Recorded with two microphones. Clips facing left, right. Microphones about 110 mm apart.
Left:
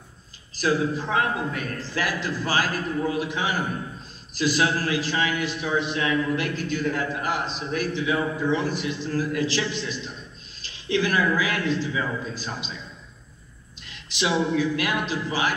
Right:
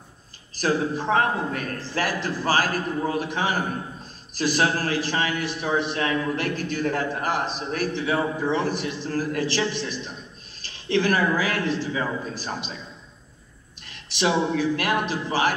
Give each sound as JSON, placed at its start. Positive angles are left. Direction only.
{"t": 0.6, "sound": "a man's voice", "side_deg": -45}
{"t": 13.8, "sound": "a man's voice", "side_deg": -45}